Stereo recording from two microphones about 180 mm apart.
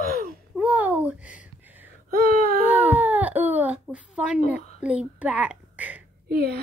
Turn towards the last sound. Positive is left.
turn(degrees=-60)  # may be behind; listen again after turning